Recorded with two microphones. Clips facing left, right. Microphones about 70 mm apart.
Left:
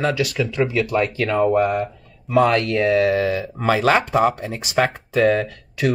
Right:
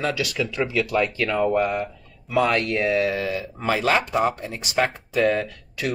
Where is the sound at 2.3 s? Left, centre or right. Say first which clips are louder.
Left 4 dB; left.